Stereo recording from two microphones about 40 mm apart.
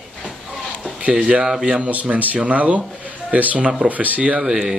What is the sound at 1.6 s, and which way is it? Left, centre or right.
Speech, right.